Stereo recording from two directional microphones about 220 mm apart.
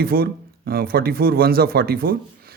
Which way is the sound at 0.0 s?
45° right (ahead or behind).